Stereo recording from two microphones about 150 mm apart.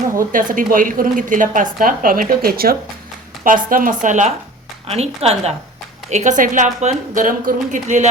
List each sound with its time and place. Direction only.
0.3 s a woman's voice: 65° right (ahead or behind); by 2.7 s 80° right
3.4 s a woman's voice: 65° right (ahead or behind)
4.9 s a woman's voice: 45° right (ahead or behind)